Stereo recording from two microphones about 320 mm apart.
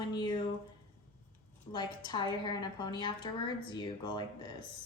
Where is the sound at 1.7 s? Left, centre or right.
Centre.